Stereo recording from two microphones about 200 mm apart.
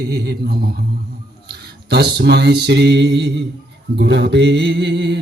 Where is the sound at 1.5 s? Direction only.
55° right (ahead or behind).